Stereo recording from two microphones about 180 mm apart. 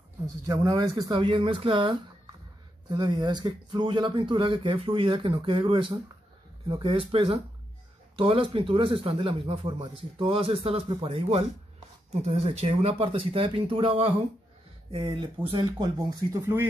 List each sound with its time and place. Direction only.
0.5 s speech: 20° right (ahead or behind)